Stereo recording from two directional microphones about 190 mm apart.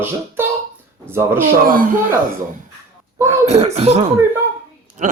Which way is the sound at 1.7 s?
45° right (ahead or behind).